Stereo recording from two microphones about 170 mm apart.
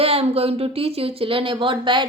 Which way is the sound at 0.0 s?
35° right (ahead or behind).